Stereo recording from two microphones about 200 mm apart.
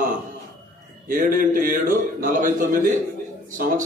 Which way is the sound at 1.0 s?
45° right (ahead or behind).